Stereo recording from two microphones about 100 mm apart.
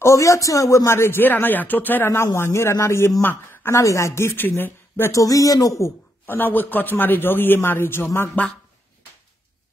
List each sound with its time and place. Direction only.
0.0 s a man's voice: 30° left (ahead or behind)
5.1 s a man's voice: 35° left (ahead or behind)